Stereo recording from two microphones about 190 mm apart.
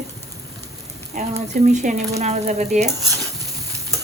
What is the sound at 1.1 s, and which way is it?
Frying, 40° right (ahead or behind).